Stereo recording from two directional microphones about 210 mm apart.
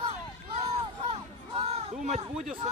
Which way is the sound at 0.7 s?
30° right (ahead or behind).